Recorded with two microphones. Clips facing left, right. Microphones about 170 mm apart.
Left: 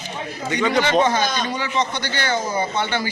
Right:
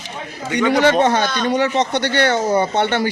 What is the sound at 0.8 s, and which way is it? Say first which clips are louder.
A man's voice: right 3 dB; 70° right (ahead or behind).